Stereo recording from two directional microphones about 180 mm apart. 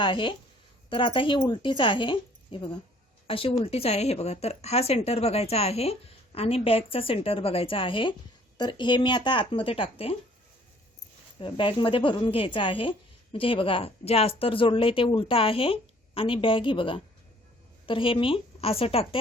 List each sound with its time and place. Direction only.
0.0 s speech: 25° left (ahead or behind)
11.3 s speech: 30° left (ahead or behind)